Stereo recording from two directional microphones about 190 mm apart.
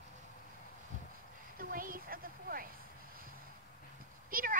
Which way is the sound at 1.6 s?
50° right (ahead or behind).